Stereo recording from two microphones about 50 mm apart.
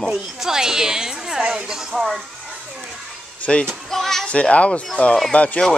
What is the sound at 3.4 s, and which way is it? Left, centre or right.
Speech, left.